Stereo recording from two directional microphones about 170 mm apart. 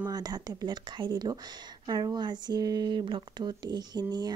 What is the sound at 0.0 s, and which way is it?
Speech, 25° right (ahead or behind).